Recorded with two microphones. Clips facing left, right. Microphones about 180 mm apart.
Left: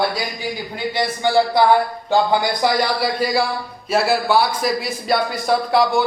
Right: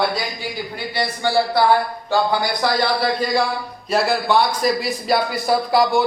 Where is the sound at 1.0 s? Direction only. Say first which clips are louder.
Left 2 dB; 20° left (ahead or behind).